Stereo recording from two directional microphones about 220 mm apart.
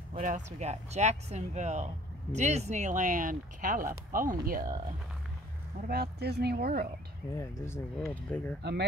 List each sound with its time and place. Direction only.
0.1 s speech: 35° right (ahead or behind)
7.3 s speech: 10° left (ahead or behind)